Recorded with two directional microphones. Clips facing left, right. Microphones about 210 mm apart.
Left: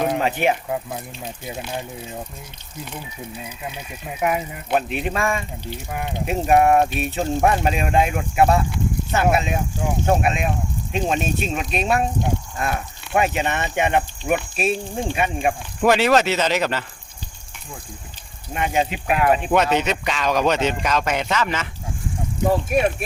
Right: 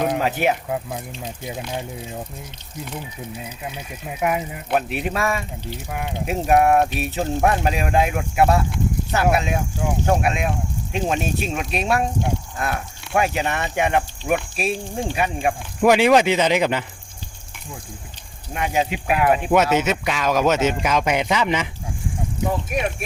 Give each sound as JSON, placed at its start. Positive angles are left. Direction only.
{"t": 0.0, "sound": "speech", "side_deg": -10}
{"t": 4.2, "sound": "speech", "side_deg": -10}
{"t": 15.9, "sound": "speech", "side_deg": -10}
{"t": 18.5, "sound": "speech", "side_deg": 0}
{"t": 22.7, "sound": "speech", "side_deg": 35}